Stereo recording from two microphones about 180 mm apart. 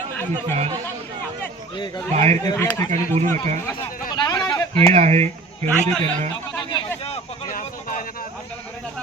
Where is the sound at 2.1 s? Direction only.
35° right (ahead or behind).